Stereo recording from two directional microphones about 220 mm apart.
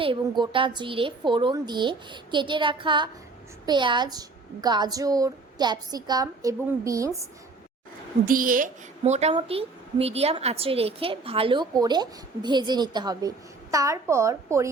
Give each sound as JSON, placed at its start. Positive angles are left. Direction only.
{"t": 0.0, "sound": "a woman's voice", "side_deg": -20}
{"t": 8.3, "sound": "a woman's voice", "side_deg": -40}